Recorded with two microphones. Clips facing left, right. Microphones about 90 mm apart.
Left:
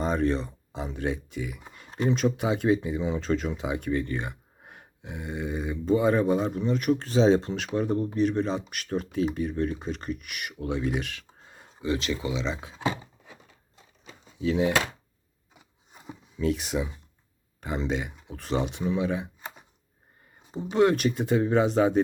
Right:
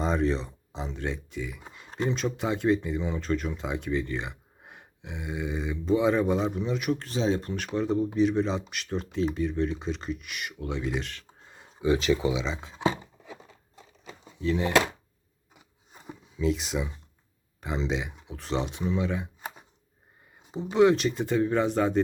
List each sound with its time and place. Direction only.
0.0 s speech: centre (ahead or behind)
1.7 s a sound: centre (ahead or behind)
2.0 s speech: 5° left (ahead or behind)
7.3 s speech: 30° left (ahead or behind)
7.7 s speech: 5° left (ahead or behind)
11.8 s speech: 20° right (ahead or behind)
12.4 s speech: centre (ahead or behind)
16.0 s speech: centre (ahead or behind)
20.5 s speech: centre (ahead or behind)